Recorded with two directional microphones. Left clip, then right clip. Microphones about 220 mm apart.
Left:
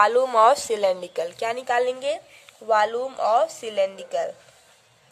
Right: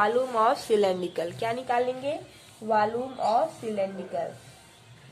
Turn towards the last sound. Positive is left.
turn(degrees=50)  # may be behind; listen again after turning